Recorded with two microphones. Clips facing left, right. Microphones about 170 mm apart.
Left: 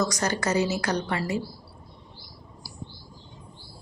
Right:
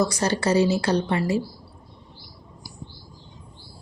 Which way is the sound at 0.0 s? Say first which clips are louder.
Right 4 dB; 30° right (ahead or behind).